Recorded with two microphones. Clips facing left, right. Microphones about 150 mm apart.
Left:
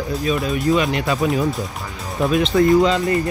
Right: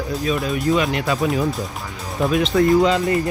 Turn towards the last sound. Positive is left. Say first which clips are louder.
# left 1 dB
turn(degrees=0)  # may be behind; listen again after turning